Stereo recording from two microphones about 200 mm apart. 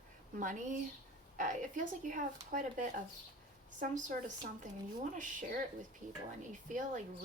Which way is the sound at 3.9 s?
40° right (ahead or behind).